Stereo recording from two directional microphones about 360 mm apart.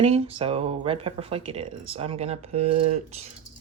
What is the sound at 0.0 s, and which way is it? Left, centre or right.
Speech, centre.